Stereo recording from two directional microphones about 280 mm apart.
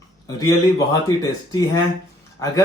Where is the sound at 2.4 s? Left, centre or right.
Centre.